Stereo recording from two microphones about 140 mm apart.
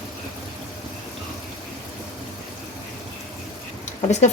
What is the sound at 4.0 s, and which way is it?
Speech, 55° left (ahead or behind).